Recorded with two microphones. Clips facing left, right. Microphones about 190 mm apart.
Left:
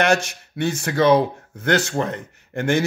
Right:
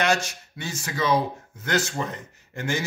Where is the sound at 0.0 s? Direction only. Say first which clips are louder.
Left 5 dB; 60° left (ahead or behind).